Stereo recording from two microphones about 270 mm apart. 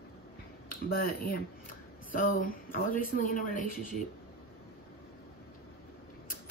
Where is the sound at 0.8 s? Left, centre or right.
Left.